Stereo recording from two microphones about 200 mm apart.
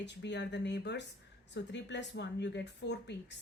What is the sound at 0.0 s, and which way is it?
A woman's voice, 60° left (ahead or behind).